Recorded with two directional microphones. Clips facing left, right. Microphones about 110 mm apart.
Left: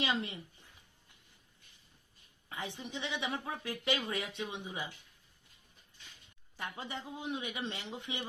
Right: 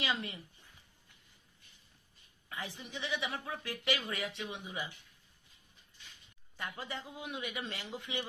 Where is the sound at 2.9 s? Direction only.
20° left (ahead or behind).